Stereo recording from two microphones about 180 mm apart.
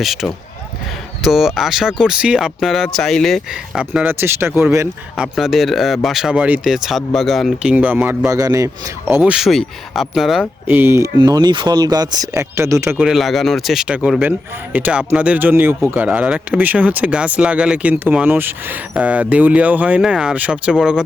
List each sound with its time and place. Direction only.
0.0 s speech: centre (ahead or behind)
8.3 s speech: 20° right (ahead or behind); by 10.4 s centre (ahead or behind)
10.7 s speech: 10° right (ahead or behind)
13.1 s speech: centre (ahead or behind)